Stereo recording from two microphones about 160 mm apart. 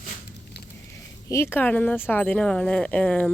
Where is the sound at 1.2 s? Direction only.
15° left (ahead or behind).